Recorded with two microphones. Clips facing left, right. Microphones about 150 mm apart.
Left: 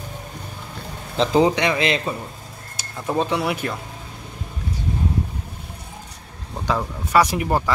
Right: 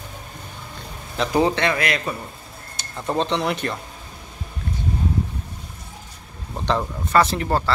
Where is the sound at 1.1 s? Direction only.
25° left (ahead or behind).